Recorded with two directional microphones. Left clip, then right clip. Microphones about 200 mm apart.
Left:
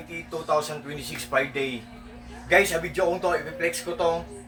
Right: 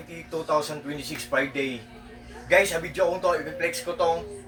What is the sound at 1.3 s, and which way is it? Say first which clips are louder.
Speech: left 1 dB; 15° left (ahead or behind).